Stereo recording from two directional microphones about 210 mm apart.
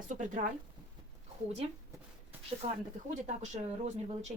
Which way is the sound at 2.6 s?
35° right (ahead or behind).